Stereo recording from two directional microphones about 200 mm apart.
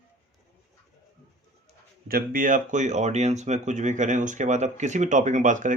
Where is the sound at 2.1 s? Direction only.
45° right (ahead or behind).